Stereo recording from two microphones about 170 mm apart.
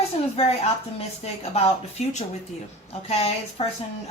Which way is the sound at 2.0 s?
40° left (ahead or behind).